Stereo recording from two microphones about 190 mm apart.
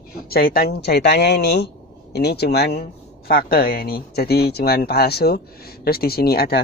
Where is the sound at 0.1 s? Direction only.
50° left (ahead or behind).